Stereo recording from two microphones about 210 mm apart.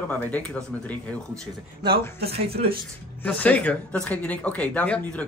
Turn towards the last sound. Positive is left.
turn(degrees=5)  # may be behind; listen again after turning